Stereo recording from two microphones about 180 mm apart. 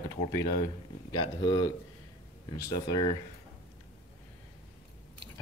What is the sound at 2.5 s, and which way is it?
Speech, 25° left (ahead or behind).